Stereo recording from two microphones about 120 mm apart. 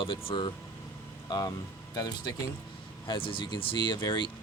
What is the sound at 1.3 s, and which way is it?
Speech, 35° left (ahead or behind).